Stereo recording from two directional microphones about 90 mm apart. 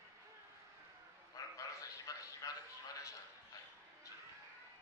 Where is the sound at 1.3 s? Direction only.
40° left (ahead or behind).